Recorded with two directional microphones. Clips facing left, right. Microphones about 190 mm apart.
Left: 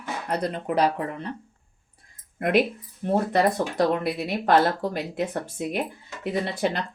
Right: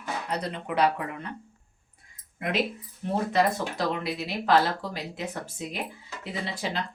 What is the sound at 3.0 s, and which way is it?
Speech, 50° left (ahead or behind).